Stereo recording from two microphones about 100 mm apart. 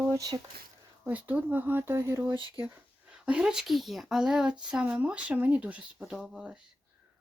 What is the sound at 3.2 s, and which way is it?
Speech, 10° right (ahead or behind).